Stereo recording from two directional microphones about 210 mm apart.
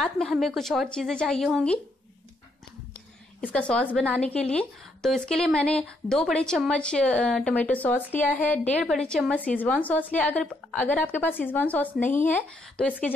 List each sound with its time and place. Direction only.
0.0 s a woman's voice: centre (ahead or behind)
3.3 s a woman's voice: 5° left (ahead or behind)